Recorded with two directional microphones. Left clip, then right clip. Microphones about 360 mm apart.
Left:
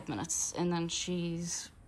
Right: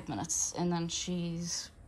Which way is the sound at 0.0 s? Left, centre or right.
Centre.